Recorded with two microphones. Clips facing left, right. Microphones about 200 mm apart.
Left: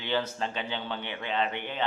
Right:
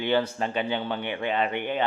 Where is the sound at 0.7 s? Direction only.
55° right (ahead or behind).